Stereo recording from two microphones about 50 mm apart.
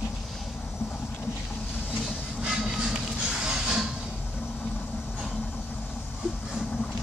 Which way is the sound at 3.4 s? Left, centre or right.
Centre.